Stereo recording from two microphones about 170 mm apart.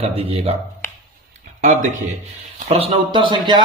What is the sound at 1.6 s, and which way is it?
Speech, 50° right (ahead or behind).